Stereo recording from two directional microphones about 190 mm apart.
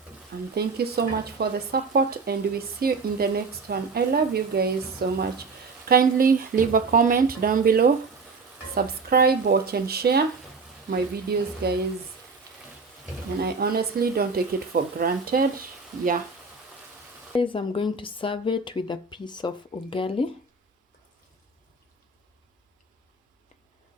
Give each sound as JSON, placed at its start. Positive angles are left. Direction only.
{"t": 0.5, "sound": "a woman's voice", "side_deg": -55}
{"t": 13.4, "sound": "speech", "side_deg": -55}
{"t": 17.3, "sound": "speech", "side_deg": 25}